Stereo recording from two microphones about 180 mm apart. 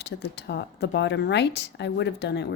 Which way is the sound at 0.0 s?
70° left (ahead or behind).